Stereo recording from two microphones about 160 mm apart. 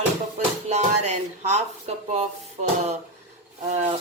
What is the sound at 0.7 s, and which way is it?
Music, 45° right (ahead or behind).